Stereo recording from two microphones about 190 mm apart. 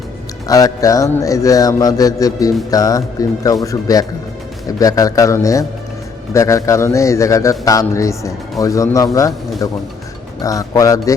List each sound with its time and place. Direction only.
0.4 s music: 20° left (ahead or behind)
2.6 s speech: 20° left (ahead or behind)
4.8 s music: 20° left (ahead or behind)